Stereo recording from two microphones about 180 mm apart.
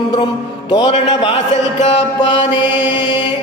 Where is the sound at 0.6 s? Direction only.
30° left (ahead or behind).